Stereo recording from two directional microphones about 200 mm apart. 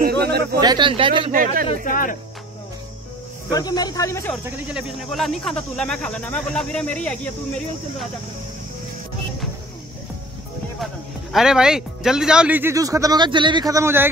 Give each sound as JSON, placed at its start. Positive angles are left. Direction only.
{"t": 0.0, "sound": "a sound", "side_deg": -55}
{"t": 0.6, "sound": "speech", "side_deg": -20}
{"t": 1.3, "sound": "a man's voice", "side_deg": -45}
{"t": 1.9, "sound": "speech", "side_deg": 40}
{"t": 3.5, "sound": "speech", "side_deg": 20}
{"t": 4.5, "sound": "speech", "side_deg": -5}
{"t": 11.3, "sound": "a man's voice", "side_deg": -5}